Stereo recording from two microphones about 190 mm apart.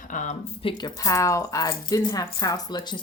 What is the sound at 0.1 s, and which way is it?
Speech, 40° left (ahead or behind).